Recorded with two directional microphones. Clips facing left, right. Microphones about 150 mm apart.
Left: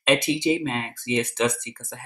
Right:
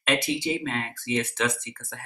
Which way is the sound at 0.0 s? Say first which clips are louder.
Left 5 dB; 20° left (ahead or behind).